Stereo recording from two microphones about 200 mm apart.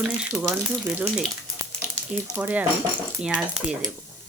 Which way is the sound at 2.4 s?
10° right (ahead or behind).